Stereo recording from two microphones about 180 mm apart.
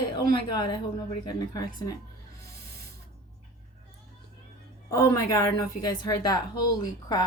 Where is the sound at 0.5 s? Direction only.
20° left (ahead or behind).